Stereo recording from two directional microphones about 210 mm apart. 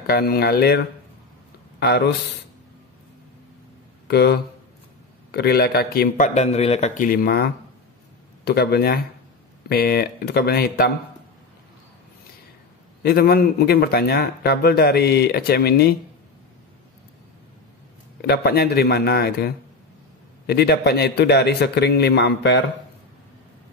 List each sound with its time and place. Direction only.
0.0 s a man's voice: 45° left (ahead or behind)
1.8 s a man's voice: 50° left (ahead or behind)
4.1 s a man's voice: 50° left (ahead or behind)
13.0 s a man's voice: 45° left (ahead or behind)
18.2 s a man's voice: 50° left (ahead or behind)